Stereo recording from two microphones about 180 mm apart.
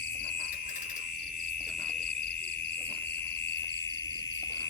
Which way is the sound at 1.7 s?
5° left (ahead or behind).